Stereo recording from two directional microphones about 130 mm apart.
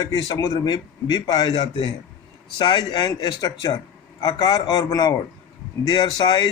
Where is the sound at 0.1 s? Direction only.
25° left (ahead or behind).